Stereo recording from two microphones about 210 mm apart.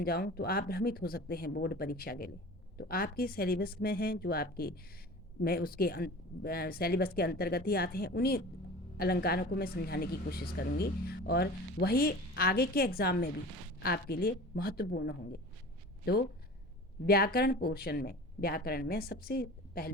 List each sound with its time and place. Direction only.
0.0 s a woman's voice: 50° left (ahead or behind)
17.1 s a woman's voice: 45° left (ahead or behind)